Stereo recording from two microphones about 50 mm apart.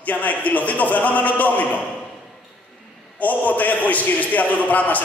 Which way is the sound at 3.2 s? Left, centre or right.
Left.